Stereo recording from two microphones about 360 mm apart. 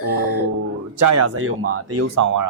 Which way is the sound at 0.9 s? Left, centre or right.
Right.